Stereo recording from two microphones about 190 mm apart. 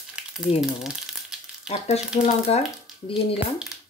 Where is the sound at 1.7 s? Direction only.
35° left (ahead or behind).